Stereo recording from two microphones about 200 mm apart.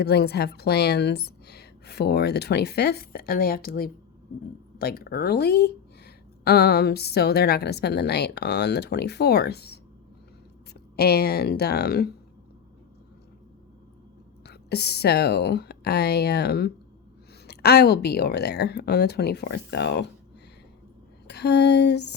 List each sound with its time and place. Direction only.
0.0 s a woman's voice: 55° left (ahead or behind)
10.9 s a woman's voice: 55° left (ahead or behind)
14.4 s a woman's voice: 55° left (ahead or behind)
21.2 s a sound: 55° left (ahead or behind)